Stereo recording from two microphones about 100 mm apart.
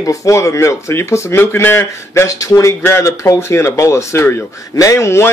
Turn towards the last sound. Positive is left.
turn(degrees=30)  # may be behind; listen again after turning